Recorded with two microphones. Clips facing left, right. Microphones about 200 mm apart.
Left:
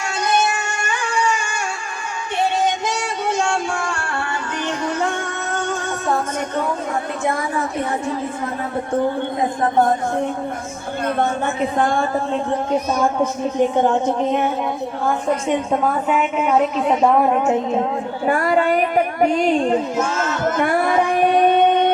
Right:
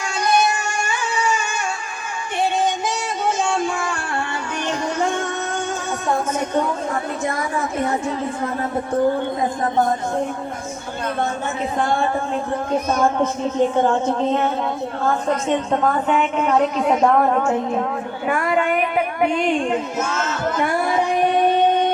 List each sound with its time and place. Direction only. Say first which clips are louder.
13.0 s a woman's voice: even; 15° left (ahead or behind)
18.3 s a woman's voice: left 3 dB; 35° left (ahead or behind)
20.6 s a sound: left 2 dB; 55° left (ahead or behind)